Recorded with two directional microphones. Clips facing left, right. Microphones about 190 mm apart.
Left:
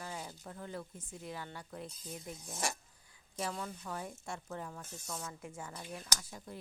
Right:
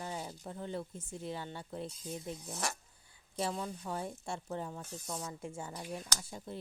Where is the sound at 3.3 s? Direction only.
25° right (ahead or behind).